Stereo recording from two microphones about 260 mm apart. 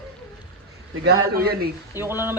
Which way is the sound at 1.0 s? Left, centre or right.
Right.